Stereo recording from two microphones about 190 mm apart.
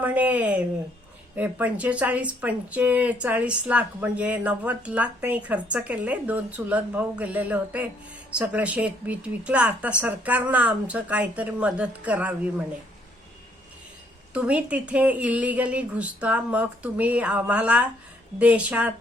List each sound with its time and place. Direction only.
0.0 s speech: 10° right (ahead or behind)
14.3 s speech: 5° right (ahead or behind)